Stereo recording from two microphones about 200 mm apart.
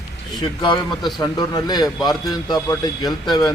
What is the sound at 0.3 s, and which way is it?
Speech, 20° left (ahead or behind).